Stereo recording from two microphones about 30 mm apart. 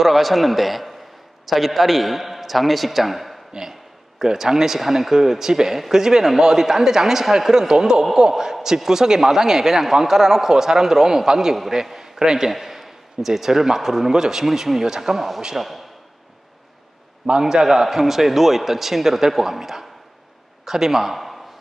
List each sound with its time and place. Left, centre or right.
0.0 s a man's voice: centre
4.2 s a man's voice: centre
17.4 s a man's voice: centre